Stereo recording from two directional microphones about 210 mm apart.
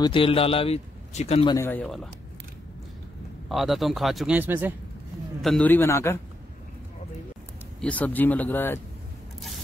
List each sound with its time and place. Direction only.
0.0 s speech: 25° left (ahead or behind)
1.6 s speech: 10° left (ahead or behind)
3.4 s a man's voice: centre (ahead or behind)
5.4 s speech: 5° left (ahead or behind)
7.8 s speech: 5° left (ahead or behind)